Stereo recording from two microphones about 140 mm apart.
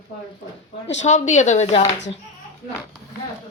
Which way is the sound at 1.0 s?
60° left (ahead or behind).